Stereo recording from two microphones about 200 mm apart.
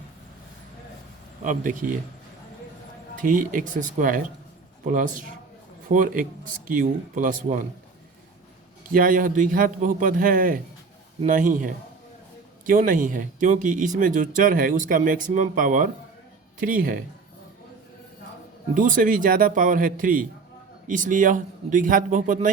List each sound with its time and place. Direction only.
1.5 s speech: 40° right (ahead or behind)
3.2 s a man's voice: 40° right (ahead or behind)
8.9 s a man's voice: 45° right (ahead or behind)
18.7 s a man's voice: 40° right (ahead or behind)